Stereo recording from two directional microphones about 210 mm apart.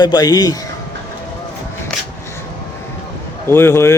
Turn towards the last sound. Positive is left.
turn(degrees=10)  # may be behind; listen again after turning